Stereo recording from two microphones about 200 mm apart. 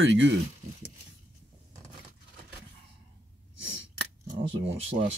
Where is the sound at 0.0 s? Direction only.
65° right (ahead or behind).